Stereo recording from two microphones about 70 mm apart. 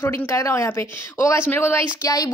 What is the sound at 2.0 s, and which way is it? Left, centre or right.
Speech, left.